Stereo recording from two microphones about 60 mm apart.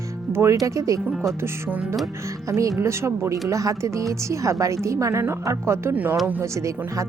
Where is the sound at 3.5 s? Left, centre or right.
Right.